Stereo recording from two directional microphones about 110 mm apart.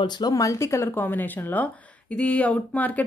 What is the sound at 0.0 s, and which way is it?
Speech, 35° left (ahead or behind).